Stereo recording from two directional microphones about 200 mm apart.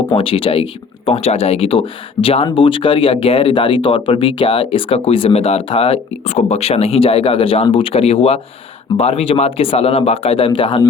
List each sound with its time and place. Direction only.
0.1 s speech: 25° left (ahead or behind)